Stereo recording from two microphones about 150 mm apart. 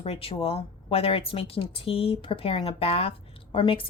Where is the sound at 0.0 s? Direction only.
40° left (ahead or behind).